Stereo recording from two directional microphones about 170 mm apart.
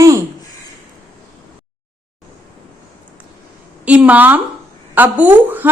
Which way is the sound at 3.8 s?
10° right (ahead or behind).